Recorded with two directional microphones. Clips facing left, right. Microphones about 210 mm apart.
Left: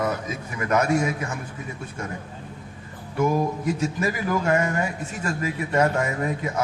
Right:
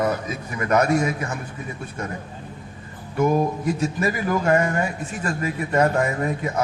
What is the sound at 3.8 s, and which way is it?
Speech, 50° right (ahead or behind).